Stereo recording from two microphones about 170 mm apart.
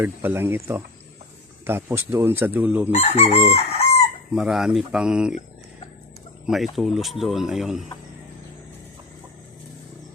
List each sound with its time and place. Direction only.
0.0 s speech: 15° right (ahead or behind)
2.9 s chicken: 40° left (ahead or behind)
4.4 s speech: 5° right (ahead or behind)
6.4 s speech: centre (ahead or behind)